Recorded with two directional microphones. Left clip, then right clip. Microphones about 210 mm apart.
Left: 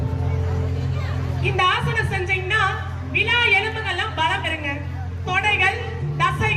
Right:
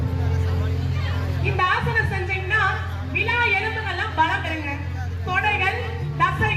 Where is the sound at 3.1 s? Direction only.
20° left (ahead or behind).